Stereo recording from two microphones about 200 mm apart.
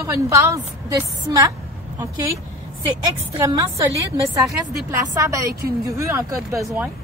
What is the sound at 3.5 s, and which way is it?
Speech, 15° right (ahead or behind).